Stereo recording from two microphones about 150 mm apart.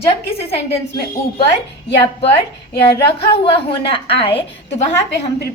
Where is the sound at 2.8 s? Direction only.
35° left (ahead or behind).